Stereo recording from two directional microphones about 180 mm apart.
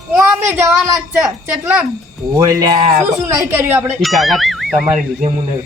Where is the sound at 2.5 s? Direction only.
20° right (ahead or behind).